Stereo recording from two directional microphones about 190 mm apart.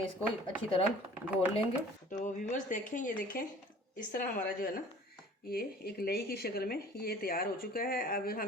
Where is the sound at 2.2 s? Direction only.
40° left (ahead or behind).